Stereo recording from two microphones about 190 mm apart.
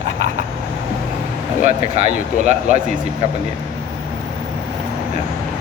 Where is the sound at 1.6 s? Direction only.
35° right (ahead or behind).